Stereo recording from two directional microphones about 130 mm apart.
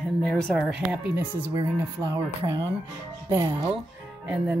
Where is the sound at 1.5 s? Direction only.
25° right (ahead or behind).